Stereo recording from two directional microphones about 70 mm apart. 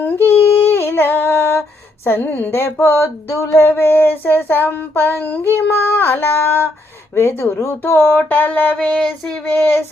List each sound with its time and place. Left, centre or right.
0.0 s a sound: left
2.0 s female singing: left
7.1 s speech: left
9.0 s child singing: centre